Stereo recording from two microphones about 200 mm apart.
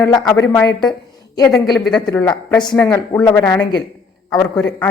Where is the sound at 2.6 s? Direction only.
10° left (ahead or behind).